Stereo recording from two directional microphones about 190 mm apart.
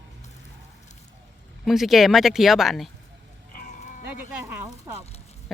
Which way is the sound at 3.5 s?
45° left (ahead or behind).